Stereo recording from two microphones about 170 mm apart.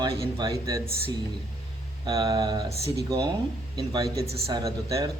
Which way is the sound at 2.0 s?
20° right (ahead or behind).